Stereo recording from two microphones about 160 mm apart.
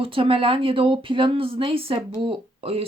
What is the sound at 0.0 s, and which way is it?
Speech, 35° right (ahead or behind).